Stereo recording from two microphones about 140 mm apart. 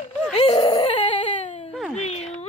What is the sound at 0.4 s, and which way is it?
Baby cry, 40° left (ahead or behind).